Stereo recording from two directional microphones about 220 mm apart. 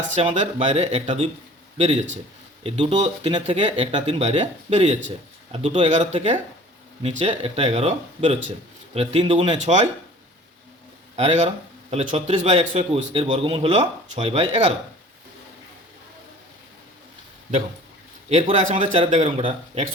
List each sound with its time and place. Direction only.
0.1 s a man's voice: 30° right (ahead or behind)
11.2 s speech: 30° right (ahead or behind)
18.3 s a man's voice: 30° right (ahead or behind)